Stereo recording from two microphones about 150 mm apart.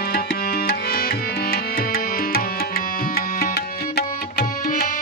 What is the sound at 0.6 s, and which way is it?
Tabla, 85° left.